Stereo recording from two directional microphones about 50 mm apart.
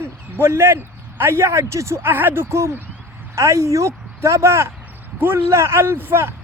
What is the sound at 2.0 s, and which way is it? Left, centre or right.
Speech, right.